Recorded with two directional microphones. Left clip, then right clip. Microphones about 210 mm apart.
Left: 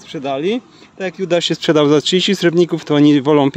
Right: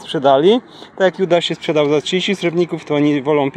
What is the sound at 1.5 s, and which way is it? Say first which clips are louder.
Speech: left 3 dB; 55° left (ahead or behind).